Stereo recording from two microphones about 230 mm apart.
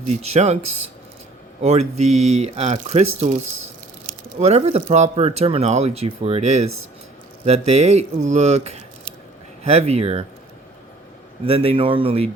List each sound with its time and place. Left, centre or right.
0.1 s speech: right
1.6 s speech: right
4.4 s speech: right
11.4 s speech: right